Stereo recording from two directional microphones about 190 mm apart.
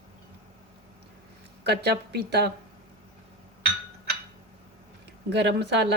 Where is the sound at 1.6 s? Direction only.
60° right (ahead or behind).